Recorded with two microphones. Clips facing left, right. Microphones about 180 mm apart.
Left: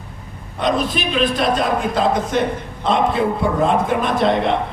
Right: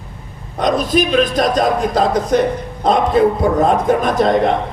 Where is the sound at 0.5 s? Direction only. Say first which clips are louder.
Right 4 dB; 40° right (ahead or behind).